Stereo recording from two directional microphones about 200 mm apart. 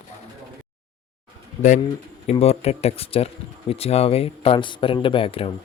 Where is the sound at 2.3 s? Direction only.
30° left (ahead or behind).